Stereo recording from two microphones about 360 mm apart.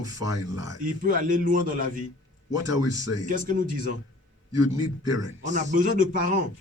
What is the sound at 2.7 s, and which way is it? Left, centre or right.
Speech, left.